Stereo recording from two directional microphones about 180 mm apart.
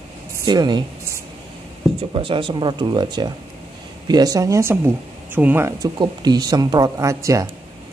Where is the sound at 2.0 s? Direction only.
30° right (ahead or behind).